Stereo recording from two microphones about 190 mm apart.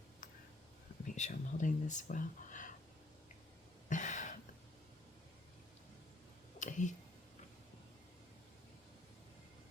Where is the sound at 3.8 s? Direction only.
40° left (ahead or behind).